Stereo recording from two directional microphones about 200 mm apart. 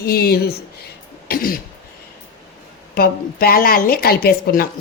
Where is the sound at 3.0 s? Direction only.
50° left (ahead or behind).